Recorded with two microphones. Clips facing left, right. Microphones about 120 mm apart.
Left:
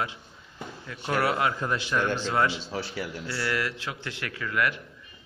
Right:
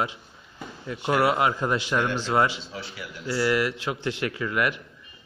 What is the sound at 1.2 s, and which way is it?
Speech, 15° right (ahead or behind).